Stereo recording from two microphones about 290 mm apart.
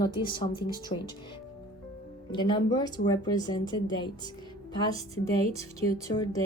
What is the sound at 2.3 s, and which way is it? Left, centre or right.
Speech, centre.